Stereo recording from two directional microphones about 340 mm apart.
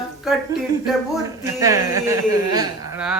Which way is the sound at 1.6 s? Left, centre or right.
Centre.